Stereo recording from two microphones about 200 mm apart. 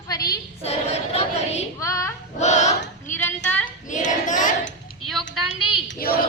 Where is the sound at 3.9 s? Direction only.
40° left (ahead or behind).